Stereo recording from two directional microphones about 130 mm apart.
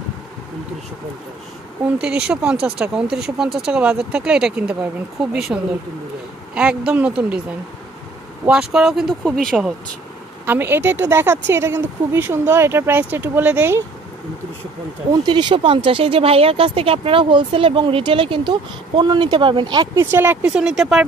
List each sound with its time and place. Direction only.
2.0 s speech: 5° right (ahead or behind)
8.5 s speech: 5° right (ahead or behind)
10.4 s speech: 15° right (ahead or behind)
15.2 s speech: 35° right (ahead or behind)
20.1 s speech: 15° right (ahead or behind)